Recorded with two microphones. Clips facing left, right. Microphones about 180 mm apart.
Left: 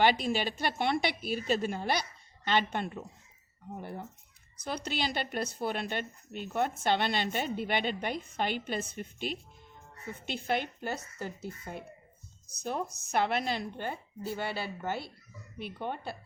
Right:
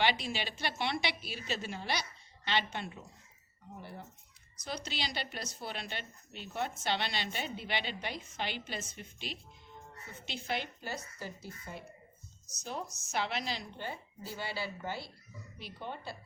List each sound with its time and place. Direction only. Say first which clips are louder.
0.0 s a woman's voice: left 6 dB; 50° left (ahead or behind)